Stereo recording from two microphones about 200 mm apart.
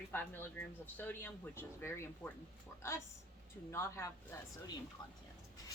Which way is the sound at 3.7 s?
15° left (ahead or behind).